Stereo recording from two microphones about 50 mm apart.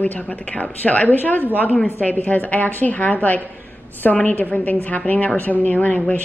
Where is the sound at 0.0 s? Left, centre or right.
Left.